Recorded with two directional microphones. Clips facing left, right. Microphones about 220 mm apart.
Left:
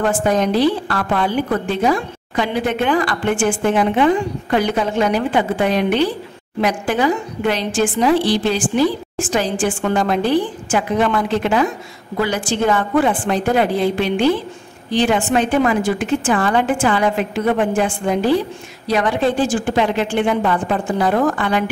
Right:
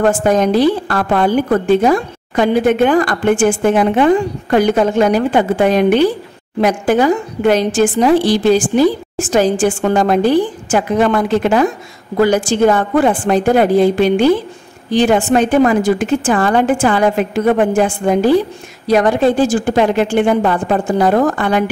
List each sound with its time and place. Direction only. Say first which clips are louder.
0.0 s a woman's voice: right 4 dB; 45° right (ahead or behind)